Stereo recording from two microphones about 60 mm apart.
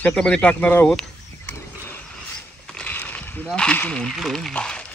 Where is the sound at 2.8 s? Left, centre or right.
Left.